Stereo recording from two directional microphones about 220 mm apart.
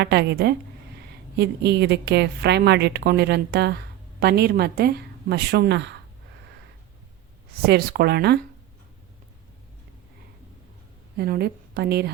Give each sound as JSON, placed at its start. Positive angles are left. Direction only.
{"t": 0.0, "sound": "a woman's voice", "side_deg": -50}
{"t": 7.6, "sound": "a woman's voice", "side_deg": -45}
{"t": 11.2, "sound": "a woman's voice", "side_deg": -45}